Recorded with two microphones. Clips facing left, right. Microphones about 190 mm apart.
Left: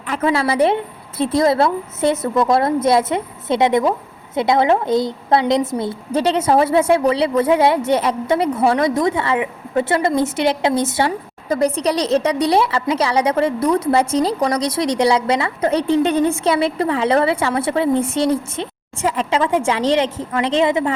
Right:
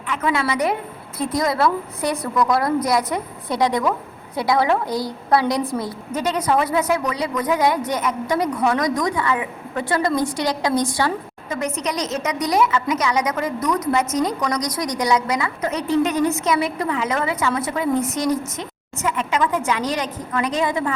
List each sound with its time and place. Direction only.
0.1 s a woman's voice: 30° left (ahead or behind)
11.4 s a woman's voice: 35° left (ahead or behind)